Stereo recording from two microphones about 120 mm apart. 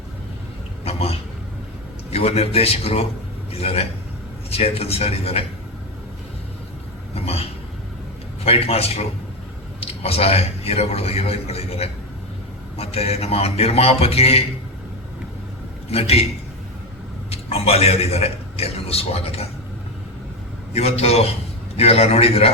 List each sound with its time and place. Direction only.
0.9 s a sound: 55° left (ahead or behind)
2.0 s a man's voice: 60° left (ahead or behind)
7.1 s a sound: 55° left (ahead or behind)
8.4 s a man's voice: 55° left (ahead or behind)
15.9 s a man's voice: 55° left (ahead or behind)
17.3 s a man's voice: 55° left (ahead or behind)
20.7 s a man's voice: 60° left (ahead or behind)